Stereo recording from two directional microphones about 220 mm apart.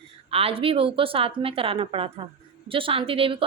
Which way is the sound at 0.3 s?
25° right (ahead or behind).